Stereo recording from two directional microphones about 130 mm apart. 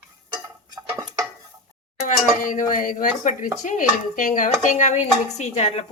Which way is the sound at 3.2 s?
80° left.